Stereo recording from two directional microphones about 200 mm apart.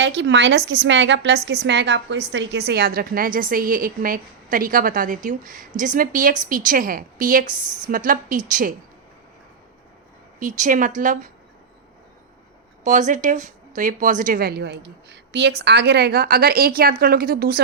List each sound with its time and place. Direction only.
0.0 s a woman's voice: 60° right (ahead or behind); by 8.7 s 40° right (ahead or behind)
10.4 s speech: 40° right (ahead or behind)
12.8 s speech: 40° right (ahead or behind)